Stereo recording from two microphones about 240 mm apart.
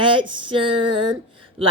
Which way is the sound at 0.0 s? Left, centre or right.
Right.